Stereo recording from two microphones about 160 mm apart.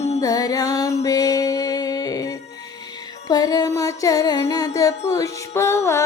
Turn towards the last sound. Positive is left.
turn(degrees=15)  # may be behind; listen again after turning